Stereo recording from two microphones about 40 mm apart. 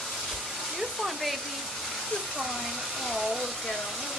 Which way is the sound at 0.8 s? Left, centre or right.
Centre.